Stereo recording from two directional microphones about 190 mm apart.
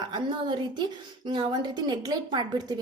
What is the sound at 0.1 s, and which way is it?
A woman's voice, 25° right (ahead or behind).